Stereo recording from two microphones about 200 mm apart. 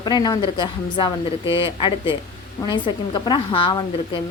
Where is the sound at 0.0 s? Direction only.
20° left (ahead or behind).